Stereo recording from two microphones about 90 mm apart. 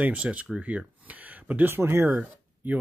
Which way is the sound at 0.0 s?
15° right (ahead or behind).